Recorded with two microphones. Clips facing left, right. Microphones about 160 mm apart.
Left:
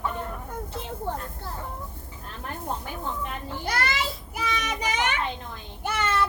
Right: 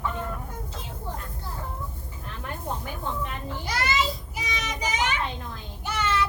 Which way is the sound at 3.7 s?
55° left (ahead or behind).